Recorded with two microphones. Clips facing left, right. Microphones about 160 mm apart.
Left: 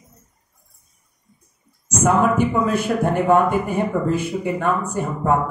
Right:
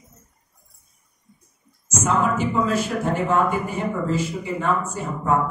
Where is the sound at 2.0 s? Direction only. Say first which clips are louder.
Left 4 dB; 55° left (ahead or behind).